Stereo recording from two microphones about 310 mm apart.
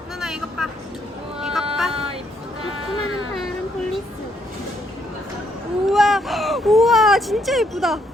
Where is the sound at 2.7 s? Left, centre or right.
Left.